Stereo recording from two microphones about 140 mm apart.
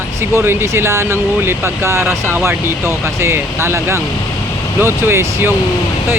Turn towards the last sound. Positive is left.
turn(degrees=-20)  # may be behind; listen again after turning